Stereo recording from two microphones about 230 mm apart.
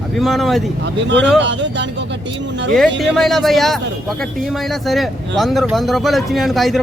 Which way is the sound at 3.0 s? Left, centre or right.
Centre.